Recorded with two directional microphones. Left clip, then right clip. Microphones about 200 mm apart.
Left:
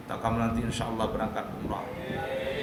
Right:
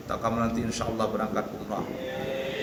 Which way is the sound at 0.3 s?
15° left (ahead or behind).